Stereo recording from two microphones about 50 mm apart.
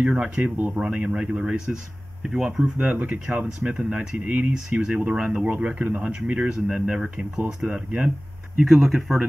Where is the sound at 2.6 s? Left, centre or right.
Right.